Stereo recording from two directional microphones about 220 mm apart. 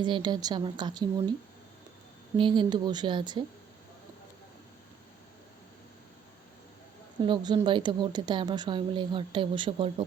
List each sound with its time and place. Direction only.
0.0 s speech: 20° right (ahead or behind)
2.3 s speech: 20° right (ahead or behind)
7.2 s speech: 20° right (ahead or behind)